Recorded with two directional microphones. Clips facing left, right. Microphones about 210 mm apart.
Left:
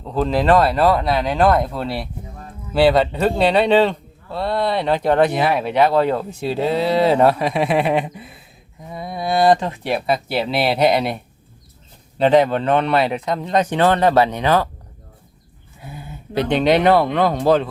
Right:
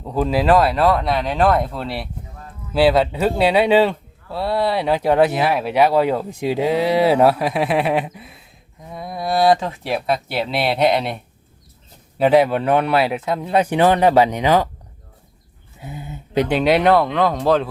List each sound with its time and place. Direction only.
0.0 s speech: 10° right (ahead or behind)
15.8 s speech: 20° right (ahead or behind)
16.5 s speech: 5° right (ahead or behind)